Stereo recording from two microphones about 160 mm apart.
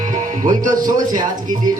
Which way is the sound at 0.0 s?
55° right (ahead or behind).